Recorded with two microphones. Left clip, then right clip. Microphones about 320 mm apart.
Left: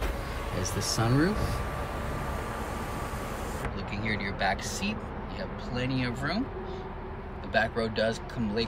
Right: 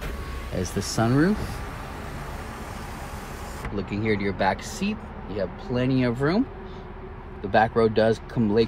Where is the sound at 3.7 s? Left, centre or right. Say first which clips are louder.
Right 11 dB; centre.